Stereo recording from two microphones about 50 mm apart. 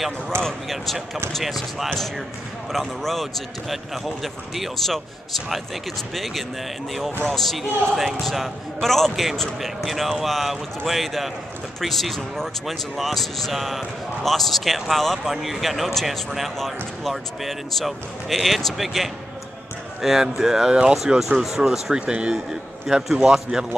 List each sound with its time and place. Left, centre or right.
0.4 s speech: centre
6.1 s a man's voice: centre
22.0 s a man's voice: right
22.3 s a man's voice: centre